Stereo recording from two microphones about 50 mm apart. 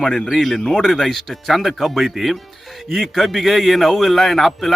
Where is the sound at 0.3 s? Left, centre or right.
Centre.